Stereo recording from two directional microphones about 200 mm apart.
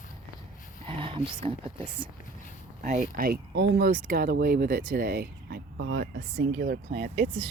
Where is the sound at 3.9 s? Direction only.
45° right (ahead or behind).